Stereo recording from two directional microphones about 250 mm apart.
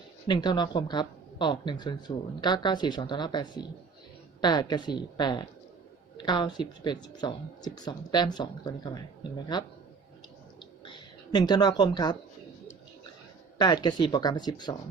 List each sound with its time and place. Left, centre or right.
0.3 s speech: centre
10.8 s speech: centre
13.6 s speech: centre